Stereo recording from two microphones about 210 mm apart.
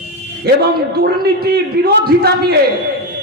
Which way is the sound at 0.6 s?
45° right (ahead or behind).